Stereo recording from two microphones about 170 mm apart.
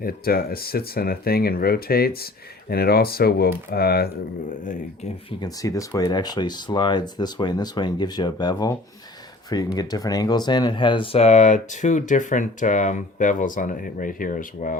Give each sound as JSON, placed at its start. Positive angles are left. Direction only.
{"t": 0.0, "sound": "speech", "side_deg": 60}
{"t": 5.4, "sound": "speech", "side_deg": 20}
{"t": 9.7, "sound": "speech", "side_deg": 20}